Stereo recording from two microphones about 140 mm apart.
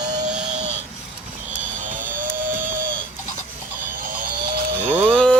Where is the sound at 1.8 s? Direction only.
70° right (ahead or behind).